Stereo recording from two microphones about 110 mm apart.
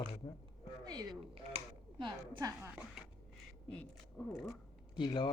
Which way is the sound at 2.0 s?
45° right (ahead or behind).